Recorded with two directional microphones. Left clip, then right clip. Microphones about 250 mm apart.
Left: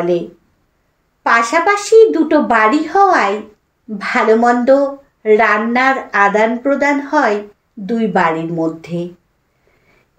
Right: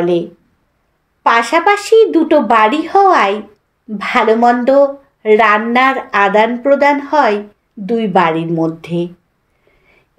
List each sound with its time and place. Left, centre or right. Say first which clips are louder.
1.2 s a woman's voice: right 1 dB; right